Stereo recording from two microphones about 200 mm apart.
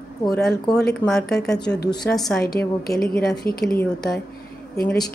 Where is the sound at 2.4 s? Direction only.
50° left (ahead or behind).